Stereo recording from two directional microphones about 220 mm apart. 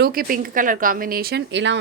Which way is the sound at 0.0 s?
40° right (ahead or behind).